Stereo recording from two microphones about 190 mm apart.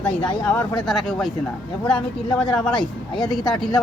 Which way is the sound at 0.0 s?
5° left (ahead or behind).